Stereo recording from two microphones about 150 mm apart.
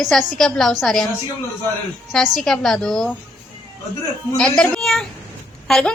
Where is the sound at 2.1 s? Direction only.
Centre (ahead or behind).